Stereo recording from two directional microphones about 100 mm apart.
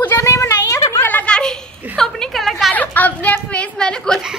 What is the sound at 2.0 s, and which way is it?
Speech, 5° left (ahead or behind).